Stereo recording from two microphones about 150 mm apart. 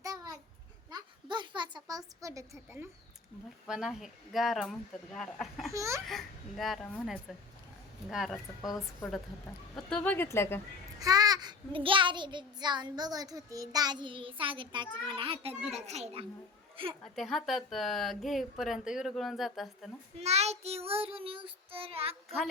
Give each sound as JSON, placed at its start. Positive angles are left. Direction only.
{"t": 0.0, "sound": "babbling", "side_deg": -25}
{"t": 0.9, "sound": "a sound", "side_deg": -30}
{"t": 3.7, "sound": "speech", "side_deg": -5}
{"t": 5.7, "sound": "laughter", "side_deg": -20}
{"t": 6.1, "sound": "speech", "side_deg": 0}
{"t": 9.7, "sound": "speech", "side_deg": 5}
{"t": 11.0, "sound": "child singing", "side_deg": -25}
{"t": 15.7, "sound": "a child's voice", "side_deg": -45}
{"t": 17.0, "sound": "speech", "side_deg": 0}
{"t": 20.1, "sound": "child singing", "side_deg": -45}